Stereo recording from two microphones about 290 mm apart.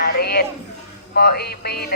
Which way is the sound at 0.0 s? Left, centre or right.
Left.